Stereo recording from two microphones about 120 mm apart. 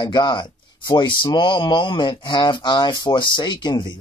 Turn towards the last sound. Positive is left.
turn(degrees=35)  # may be behind; listen again after turning